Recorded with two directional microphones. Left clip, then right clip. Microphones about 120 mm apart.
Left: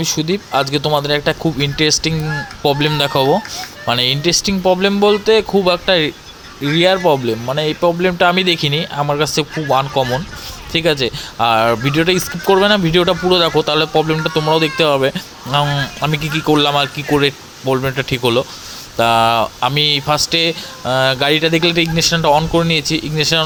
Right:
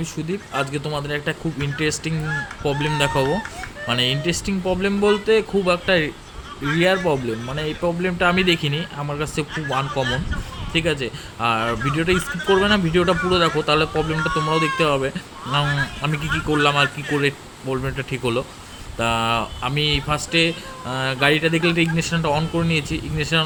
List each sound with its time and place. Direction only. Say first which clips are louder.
0.0 s speech: left 10 dB; 45° left (ahead or behind)
10.7 s speech: left 7 dB; 45° left (ahead or behind)